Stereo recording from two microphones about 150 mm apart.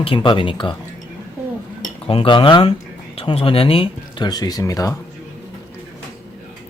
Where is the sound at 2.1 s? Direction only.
35° left (ahead or behind).